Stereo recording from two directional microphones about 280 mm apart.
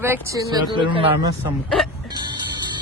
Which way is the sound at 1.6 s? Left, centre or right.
Centre.